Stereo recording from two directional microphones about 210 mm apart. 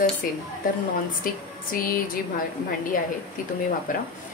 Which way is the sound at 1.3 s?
45° left (ahead or behind).